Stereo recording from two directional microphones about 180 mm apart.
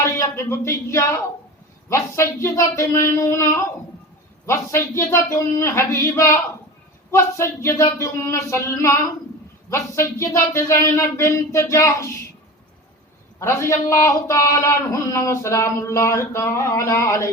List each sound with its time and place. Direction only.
0.0 s speech: 15° left (ahead or behind)
13.4 s speech: 15° left (ahead or behind)